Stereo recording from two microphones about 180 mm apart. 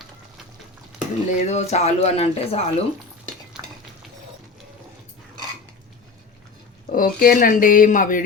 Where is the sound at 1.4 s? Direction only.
40° left (ahead or behind).